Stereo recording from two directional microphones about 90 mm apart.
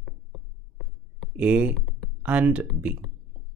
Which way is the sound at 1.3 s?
15° right (ahead or behind).